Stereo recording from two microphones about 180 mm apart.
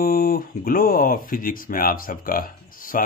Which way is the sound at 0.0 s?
55° left (ahead or behind).